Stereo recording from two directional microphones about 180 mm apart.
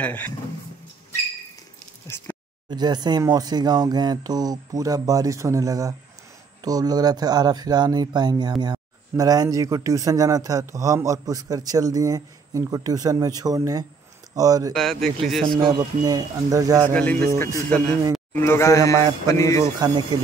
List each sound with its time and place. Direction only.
0.0 s speech: 10° left (ahead or behind)
2.1 s speech: 15° left (ahead or behind)
2.7 s speech: 25° right (ahead or behind)
14.7 s speech: centre (ahead or behind)
15.4 s speech: 25° right (ahead or behind)
16.9 s speech: 5° left (ahead or behind)
19.8 s speech: 20° right (ahead or behind)